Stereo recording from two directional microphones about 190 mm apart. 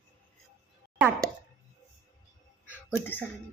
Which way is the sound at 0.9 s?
10° right (ahead or behind).